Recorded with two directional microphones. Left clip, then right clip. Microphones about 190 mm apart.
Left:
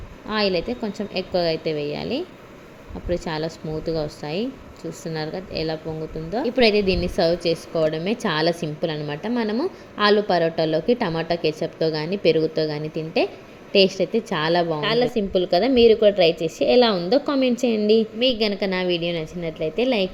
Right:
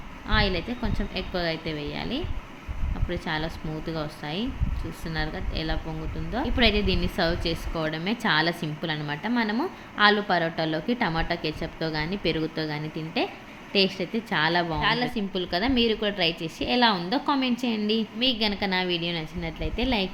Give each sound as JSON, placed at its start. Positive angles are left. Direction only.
{"t": 0.3, "sound": "a woman's voice", "side_deg": 15}
{"t": 6.7, "sound": "a woman's voice", "side_deg": -35}
{"t": 7.2, "sound": "a woman's voice", "side_deg": 10}
{"t": 18.2, "sound": "a woman's voice", "side_deg": -30}
{"t": 19.1, "sound": "a woman's voice", "side_deg": 5}
{"t": 19.5, "sound": "a woman's voice", "side_deg": -30}